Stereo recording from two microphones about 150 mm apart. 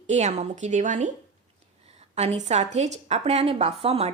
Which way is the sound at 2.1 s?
45° right (ahead or behind).